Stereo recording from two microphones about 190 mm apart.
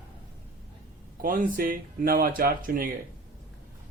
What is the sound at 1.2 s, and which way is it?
Speech, 45° right (ahead or behind).